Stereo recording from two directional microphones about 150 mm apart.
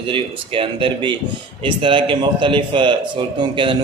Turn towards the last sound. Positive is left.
turn(degrees=-35)  # may be behind; listen again after turning